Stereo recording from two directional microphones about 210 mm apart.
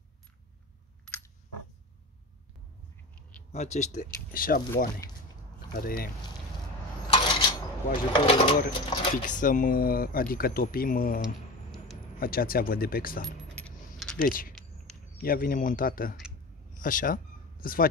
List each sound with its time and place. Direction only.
3.5 s speech: 30° left (ahead or behind)
5.8 s speech: 45° left (ahead or behind)
7.1 s coin: 25° left (ahead or behind)
8.1 s speech: 25° left (ahead or behind)
9.2 s speech: 40° left (ahead or behind)
12.2 s speech: 45° left (ahead or behind)
13.6 s keys jangling: 5° left (ahead or behind)
14.2 s speech: 40° left (ahead or behind)